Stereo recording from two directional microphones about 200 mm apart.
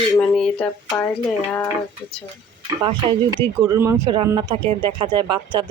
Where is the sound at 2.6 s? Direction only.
25° right (ahead or behind).